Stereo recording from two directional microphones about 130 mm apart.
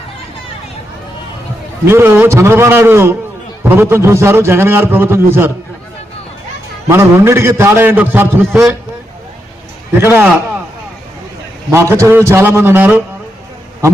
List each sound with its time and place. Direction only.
1.9 s a man's voice: 20° right (ahead or behind)
6.8 s a man's voice: 20° right (ahead or behind)
10.0 s a man's voice: 15° right (ahead or behind)
11.7 s a man's voice: 20° right (ahead or behind)